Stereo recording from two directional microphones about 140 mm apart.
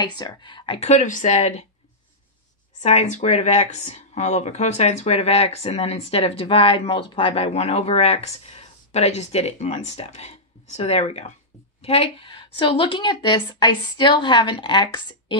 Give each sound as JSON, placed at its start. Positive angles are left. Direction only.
{"t": 0.0, "sound": "speech", "side_deg": 30}
{"t": 2.8, "sound": "a woman's voice", "side_deg": 50}